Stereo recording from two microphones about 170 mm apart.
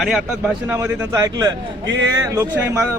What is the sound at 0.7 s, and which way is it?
A man's voice, 15° right (ahead or behind).